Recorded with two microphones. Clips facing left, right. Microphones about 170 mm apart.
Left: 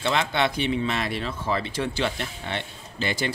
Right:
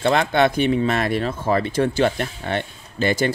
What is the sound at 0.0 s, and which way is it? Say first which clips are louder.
Speech: right 7 dB; 50° right (ahead or behind).